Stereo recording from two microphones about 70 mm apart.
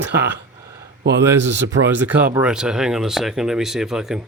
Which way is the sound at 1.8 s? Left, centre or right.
Right.